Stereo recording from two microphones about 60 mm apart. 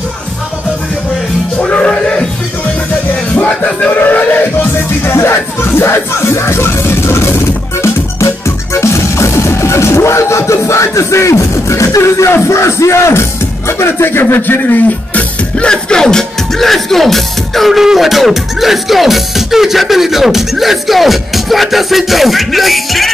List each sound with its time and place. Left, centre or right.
1.6 s music: centre
3.3 s music: left
3.9 s a sound: left
5.3 s speech: left
7.8 s music: left
12.3 s speech: left
15.5 s speech: centre